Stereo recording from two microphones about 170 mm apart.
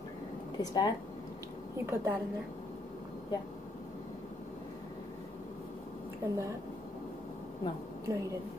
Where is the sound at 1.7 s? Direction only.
15° right (ahead or behind).